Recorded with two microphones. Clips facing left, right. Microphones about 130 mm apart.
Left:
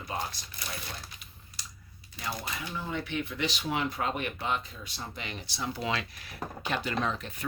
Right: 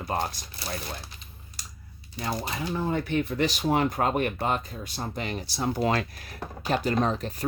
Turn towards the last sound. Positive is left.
turn(degrees=-40)  # may be behind; listen again after turning